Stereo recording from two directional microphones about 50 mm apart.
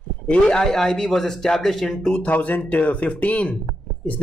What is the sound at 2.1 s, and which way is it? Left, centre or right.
A man's voice, left.